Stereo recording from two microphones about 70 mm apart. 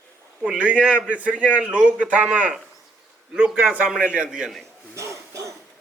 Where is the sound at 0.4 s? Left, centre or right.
Centre.